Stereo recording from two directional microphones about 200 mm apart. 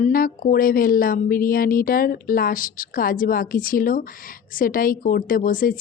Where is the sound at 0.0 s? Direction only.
45° left (ahead or behind).